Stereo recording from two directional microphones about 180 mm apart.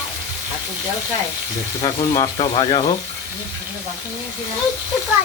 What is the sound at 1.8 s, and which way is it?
Speech, 25° left (ahead or behind).